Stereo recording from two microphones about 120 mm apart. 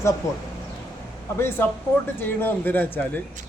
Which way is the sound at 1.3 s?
20° left (ahead or behind).